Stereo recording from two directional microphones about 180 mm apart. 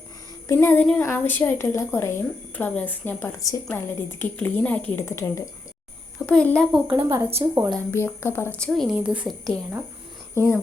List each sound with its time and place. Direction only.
0.4 s a woman's voice: 15° left (ahead or behind)
6.8 s a woman's voice: 10° right (ahead or behind)
7.4 s speech: 25° right (ahead or behind)
7.9 s a woman's voice: 15° left (ahead or behind); by 9.2 s 5° right (ahead or behind)
10.3 s speech: 15° left (ahead or behind)